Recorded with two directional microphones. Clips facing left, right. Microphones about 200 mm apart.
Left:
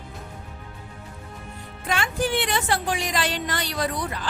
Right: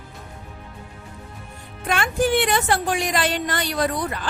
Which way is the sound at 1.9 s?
50° right (ahead or behind).